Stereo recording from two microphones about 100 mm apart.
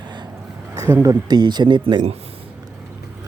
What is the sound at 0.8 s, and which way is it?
Speech, 25° right (ahead or behind).